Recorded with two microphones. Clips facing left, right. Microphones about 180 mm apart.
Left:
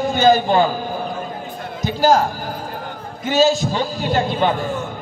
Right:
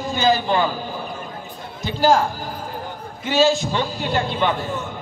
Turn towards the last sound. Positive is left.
turn(degrees=40)  # may be behind; listen again after turning